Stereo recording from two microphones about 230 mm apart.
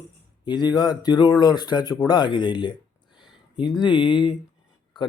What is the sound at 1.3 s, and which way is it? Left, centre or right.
Mantra, centre.